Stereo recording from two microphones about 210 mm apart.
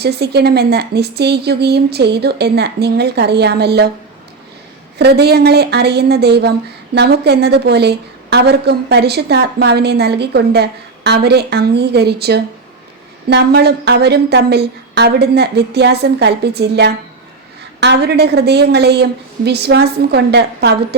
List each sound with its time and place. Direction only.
0.0 s a woman's voice: 50° right (ahead or behind)
4.9 s a woman's voice: 50° right (ahead or behind)